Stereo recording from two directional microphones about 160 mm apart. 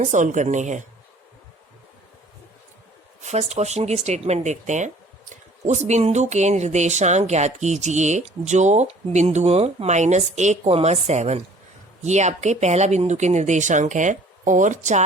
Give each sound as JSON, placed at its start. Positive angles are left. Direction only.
{"t": 0.0, "sound": "speech", "side_deg": -50}
{"t": 3.2, "sound": "speech", "side_deg": -45}